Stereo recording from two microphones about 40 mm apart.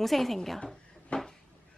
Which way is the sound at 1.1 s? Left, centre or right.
Left.